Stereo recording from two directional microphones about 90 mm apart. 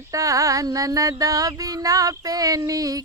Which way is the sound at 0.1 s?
40° right (ahead or behind).